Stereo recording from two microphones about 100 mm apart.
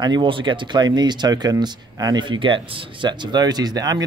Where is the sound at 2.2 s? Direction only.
55° right (ahead or behind); by 4.0 s 40° right (ahead or behind).